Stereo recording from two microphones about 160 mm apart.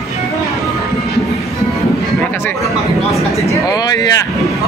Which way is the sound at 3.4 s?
25° left (ahead or behind).